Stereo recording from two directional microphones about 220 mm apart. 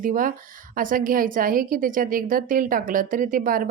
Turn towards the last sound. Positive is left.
turn(degrees=-40)  # may be behind; listen again after turning